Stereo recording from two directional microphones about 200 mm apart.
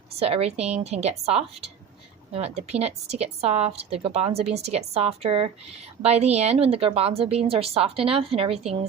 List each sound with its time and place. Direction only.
0.1 s a woman's voice: 30° right (ahead or behind)